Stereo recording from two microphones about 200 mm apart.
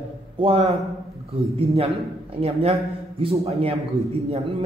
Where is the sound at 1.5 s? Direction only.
30° right (ahead or behind).